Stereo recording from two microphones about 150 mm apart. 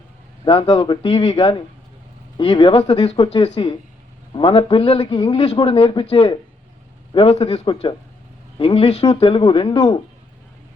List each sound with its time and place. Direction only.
0.4 s a man's voice: 35° left (ahead or behind)